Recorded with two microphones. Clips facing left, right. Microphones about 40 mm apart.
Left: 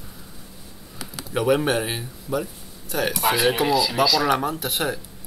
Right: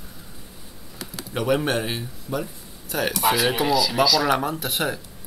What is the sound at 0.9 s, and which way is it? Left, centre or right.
Speech, centre.